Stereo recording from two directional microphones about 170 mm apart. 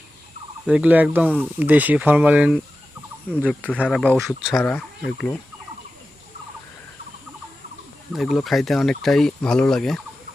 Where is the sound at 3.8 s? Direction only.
5° right (ahead or behind).